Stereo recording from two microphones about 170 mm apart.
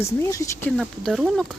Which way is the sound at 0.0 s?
15° left (ahead or behind).